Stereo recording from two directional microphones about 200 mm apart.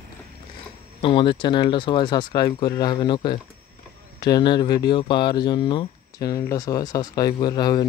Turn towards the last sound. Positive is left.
turn(degrees=20)  # may be behind; listen again after turning